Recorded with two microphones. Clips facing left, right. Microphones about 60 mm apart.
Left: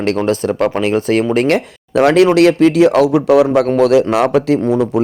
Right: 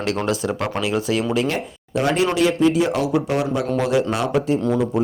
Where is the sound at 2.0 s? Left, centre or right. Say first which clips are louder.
Left 9 dB; left.